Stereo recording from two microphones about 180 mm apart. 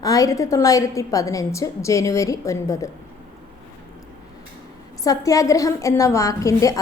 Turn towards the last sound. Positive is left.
turn(degrees=20)  # may be behind; listen again after turning